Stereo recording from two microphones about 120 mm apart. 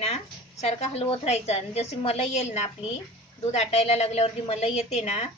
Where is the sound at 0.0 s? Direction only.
60° left (ahead or behind).